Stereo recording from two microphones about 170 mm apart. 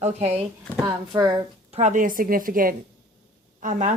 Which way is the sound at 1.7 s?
45° right (ahead or behind).